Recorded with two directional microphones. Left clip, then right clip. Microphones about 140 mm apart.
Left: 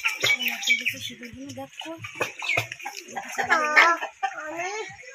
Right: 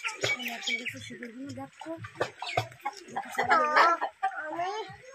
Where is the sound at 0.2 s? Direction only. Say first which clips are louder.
Left 6 dB; 60° left (ahead or behind).